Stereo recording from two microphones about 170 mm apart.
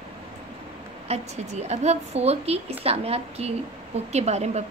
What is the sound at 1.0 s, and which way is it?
A woman's voice, 40° right (ahead or behind).